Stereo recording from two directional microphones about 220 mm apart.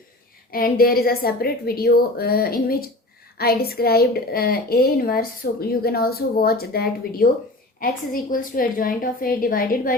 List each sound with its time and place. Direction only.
0.5 s a woman's voice: 40° left (ahead or behind)